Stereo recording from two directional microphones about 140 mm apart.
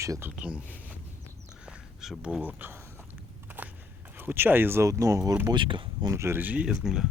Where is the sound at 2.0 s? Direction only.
5° right (ahead or behind).